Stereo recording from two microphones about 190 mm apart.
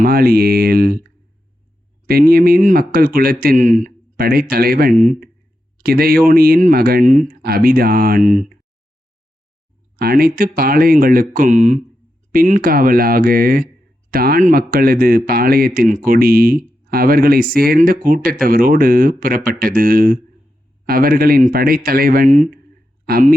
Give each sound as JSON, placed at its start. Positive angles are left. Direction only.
{"t": 0.0, "sound": "a man's voice", "side_deg": -50}
{"t": 2.0, "sound": "a man's voice", "side_deg": -50}
{"t": 10.0, "sound": "a man's voice", "side_deg": -50}